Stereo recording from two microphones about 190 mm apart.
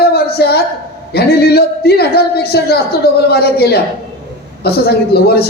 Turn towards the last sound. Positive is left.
turn(degrees=55)  # may be behind; listen again after turning